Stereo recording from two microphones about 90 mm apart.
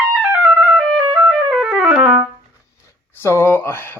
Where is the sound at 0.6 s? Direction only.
Centre (ahead or behind).